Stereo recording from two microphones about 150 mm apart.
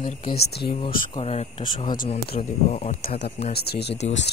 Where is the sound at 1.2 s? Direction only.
45° left (ahead or behind).